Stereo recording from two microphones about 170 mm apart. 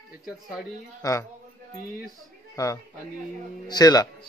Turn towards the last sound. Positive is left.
turn(degrees=20)  # may be behind; listen again after turning